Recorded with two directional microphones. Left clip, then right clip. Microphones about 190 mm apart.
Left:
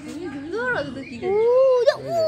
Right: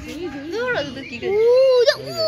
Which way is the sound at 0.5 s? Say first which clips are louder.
Right 2 dB; 55° left (ahead or behind).